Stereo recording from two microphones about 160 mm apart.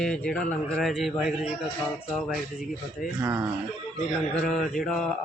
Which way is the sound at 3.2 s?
15° right (ahead or behind).